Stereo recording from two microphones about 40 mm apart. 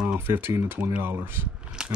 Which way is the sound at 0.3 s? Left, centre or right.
Right.